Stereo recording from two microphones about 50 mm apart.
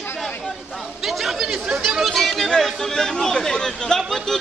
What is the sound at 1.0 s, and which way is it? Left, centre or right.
A man's voice, centre.